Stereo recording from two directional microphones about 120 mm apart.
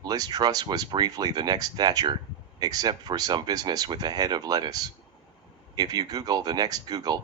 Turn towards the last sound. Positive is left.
turn(degrees=-35)  # may be behind; listen again after turning